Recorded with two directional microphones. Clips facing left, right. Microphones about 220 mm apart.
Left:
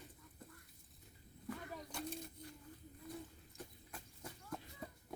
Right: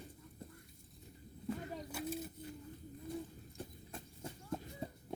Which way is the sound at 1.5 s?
25° right (ahead or behind).